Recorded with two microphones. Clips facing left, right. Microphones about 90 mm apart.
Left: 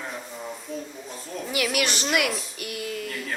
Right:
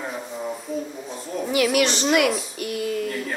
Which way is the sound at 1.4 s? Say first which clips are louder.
Right 6 dB; 30° right (ahead or behind).